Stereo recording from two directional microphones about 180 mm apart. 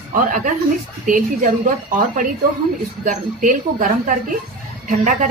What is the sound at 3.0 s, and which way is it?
Speech, 45° right (ahead or behind).